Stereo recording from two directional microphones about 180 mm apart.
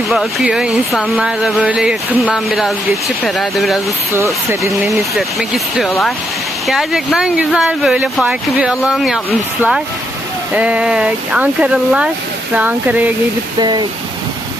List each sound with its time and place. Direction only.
0.1 s speech: 5° right (ahead or behind)
4.1 s speech: 15° right (ahead or behind)
4.9 s speech: centre (ahead or behind)
13.6 s speech: 25° right (ahead or behind)